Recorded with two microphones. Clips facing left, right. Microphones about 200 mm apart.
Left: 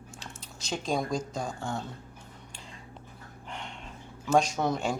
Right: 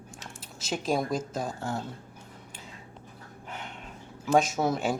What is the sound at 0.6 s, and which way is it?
Speech, 5° right (ahead or behind).